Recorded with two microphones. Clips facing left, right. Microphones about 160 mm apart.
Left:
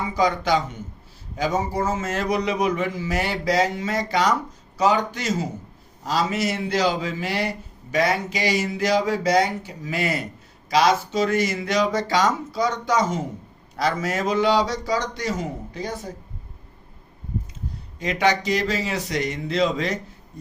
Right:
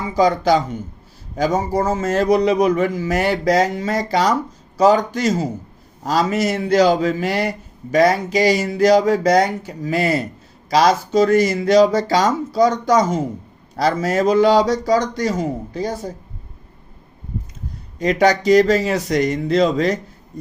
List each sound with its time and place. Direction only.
0.2 s a man's voice: 35° right (ahead or behind)
18.0 s a man's voice: 40° right (ahead or behind)
20.3 s a sound: 40° right (ahead or behind)